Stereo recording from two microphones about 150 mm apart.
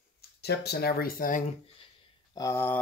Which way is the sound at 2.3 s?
20° left (ahead or behind).